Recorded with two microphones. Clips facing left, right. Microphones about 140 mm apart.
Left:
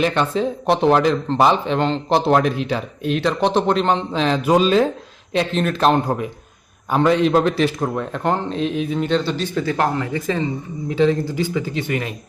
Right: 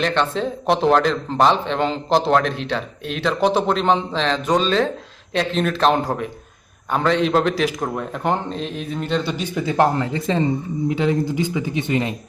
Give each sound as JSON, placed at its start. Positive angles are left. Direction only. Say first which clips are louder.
{"t": 0.0, "sound": "a man's voice", "louder": "left 2 dB", "side_deg": 5}
{"t": 9.7, "sound": "speech", "louder": "right 2 dB", "side_deg": -25}
{"t": 10.8, "sound": "speech", "louder": "left 2 dB", "side_deg": -15}